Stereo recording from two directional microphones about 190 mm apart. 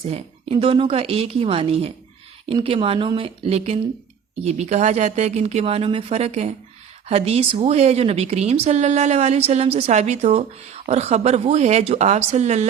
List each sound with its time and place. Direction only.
0.1 s speech: 35° right (ahead or behind)